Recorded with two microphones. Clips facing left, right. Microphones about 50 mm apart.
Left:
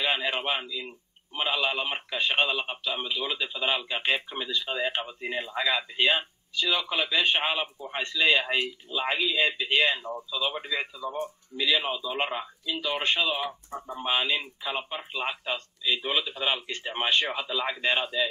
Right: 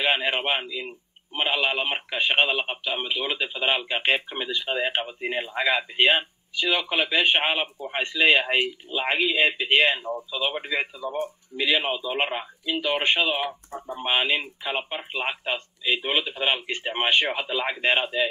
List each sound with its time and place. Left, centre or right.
0.0 s speech: right